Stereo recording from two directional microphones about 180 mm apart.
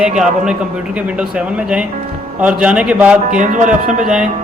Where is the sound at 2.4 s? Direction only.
5° right (ahead or behind).